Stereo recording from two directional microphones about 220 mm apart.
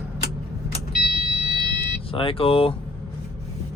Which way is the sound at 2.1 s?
25° left (ahead or behind).